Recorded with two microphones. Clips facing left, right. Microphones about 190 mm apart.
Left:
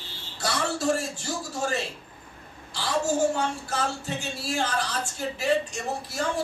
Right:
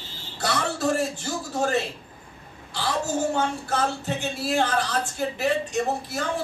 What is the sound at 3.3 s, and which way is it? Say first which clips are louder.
Speech: right 3 dB; 60° right (ahead or behind).